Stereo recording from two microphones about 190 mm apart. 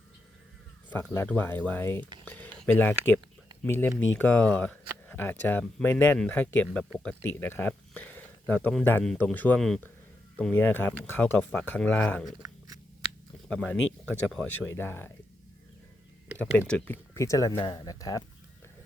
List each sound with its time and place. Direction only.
1.1 s speech: 10° left (ahead or behind)
2.2 s a sound: 10° left (ahead or behind)
3.6 s speech: 10° left (ahead or behind)
13.5 s speech: 5° left (ahead or behind)
16.4 s speech: 5° left (ahead or behind)